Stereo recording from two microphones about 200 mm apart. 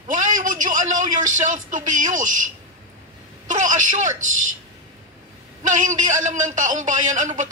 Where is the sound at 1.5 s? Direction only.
40° right (ahead or behind).